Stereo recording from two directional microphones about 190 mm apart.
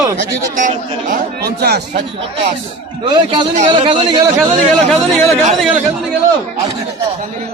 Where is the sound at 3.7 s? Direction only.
25° right (ahead or behind).